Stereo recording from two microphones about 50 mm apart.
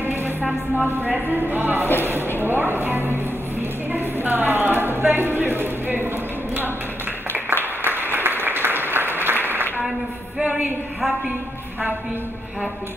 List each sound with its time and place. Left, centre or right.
0.8 s speech: right
7.3 s applause: right